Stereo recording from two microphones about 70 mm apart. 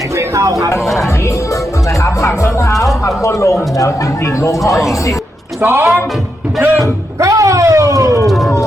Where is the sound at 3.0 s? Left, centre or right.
Left.